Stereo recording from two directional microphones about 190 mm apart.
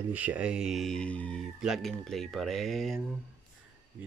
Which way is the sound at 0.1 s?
10° right (ahead or behind).